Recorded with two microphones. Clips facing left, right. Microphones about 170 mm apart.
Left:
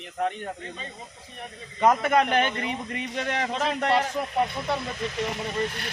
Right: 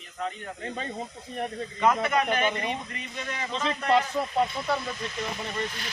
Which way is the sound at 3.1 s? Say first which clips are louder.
Left 5 dB; 70° left (ahead or behind).